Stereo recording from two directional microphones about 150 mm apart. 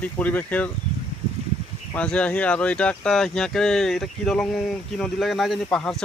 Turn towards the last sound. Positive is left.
turn(degrees=5)  # may be behind; listen again after turning